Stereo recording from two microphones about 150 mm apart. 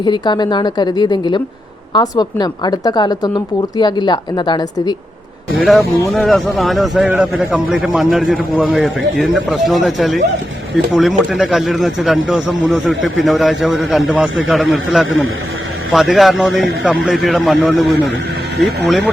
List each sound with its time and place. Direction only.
0.0 s speech: 30° left (ahead or behind)
5.5 s speech: centre (ahead or behind)